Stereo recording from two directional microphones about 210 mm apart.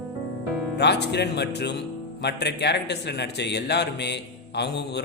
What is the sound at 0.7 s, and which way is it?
Speech, 55° left (ahead or behind).